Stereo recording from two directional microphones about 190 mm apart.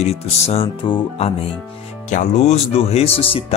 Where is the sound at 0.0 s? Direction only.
35° left (ahead or behind).